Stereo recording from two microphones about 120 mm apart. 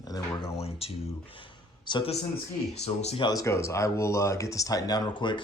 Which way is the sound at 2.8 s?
65° left (ahead or behind).